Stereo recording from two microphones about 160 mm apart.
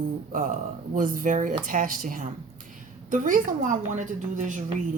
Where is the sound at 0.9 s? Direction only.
55° right (ahead or behind).